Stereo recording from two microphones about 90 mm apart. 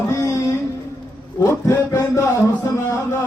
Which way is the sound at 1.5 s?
30° left (ahead or behind).